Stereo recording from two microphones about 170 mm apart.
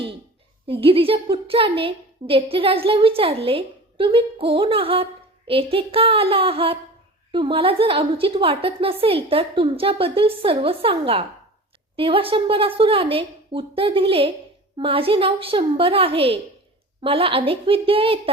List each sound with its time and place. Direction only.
0.7 s a woman's voice: 30° right (ahead or behind)